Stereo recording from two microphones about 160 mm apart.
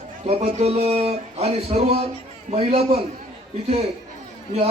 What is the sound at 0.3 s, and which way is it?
A man's voice, 40° right (ahead or behind).